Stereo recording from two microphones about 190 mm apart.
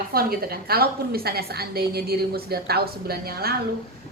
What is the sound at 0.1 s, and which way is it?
A woman's voice, 50° right (ahead or behind).